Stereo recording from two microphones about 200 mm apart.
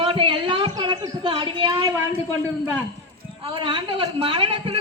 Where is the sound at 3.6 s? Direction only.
25° right (ahead or behind).